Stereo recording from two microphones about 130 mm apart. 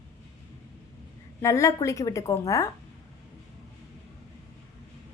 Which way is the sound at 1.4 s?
25° left (ahead or behind).